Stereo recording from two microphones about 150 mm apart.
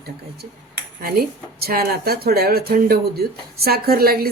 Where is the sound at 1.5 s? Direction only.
90° right.